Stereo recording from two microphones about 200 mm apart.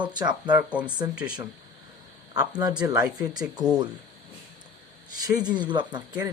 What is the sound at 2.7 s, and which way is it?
Speech, 15° right (ahead or behind).